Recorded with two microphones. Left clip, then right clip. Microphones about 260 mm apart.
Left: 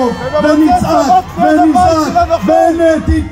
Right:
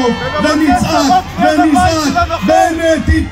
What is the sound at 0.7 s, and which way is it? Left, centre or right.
Speech, left.